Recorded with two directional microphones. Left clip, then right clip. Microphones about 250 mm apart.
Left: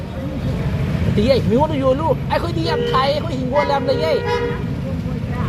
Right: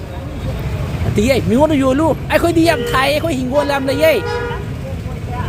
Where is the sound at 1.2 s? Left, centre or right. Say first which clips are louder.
Right 3 dB; right.